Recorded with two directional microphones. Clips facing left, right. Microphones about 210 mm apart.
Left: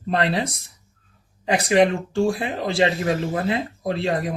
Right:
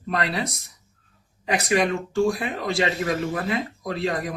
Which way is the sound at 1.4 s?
30° left (ahead or behind).